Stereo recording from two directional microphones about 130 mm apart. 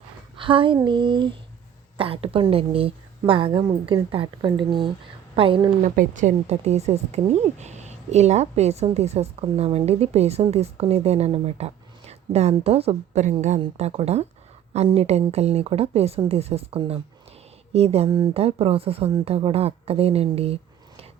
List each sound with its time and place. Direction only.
0.3 s a woman's voice: 40° right (ahead or behind)
5.8 s a woman's voice: 85° right; by 21.1 s 50° right (ahead or behind)